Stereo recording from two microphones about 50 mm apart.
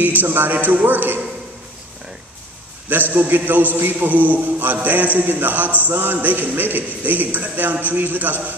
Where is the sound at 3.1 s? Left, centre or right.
Right.